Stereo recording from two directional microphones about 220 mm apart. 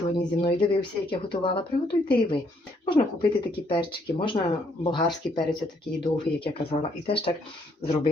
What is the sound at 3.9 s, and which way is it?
Speech, 20° left (ahead or behind).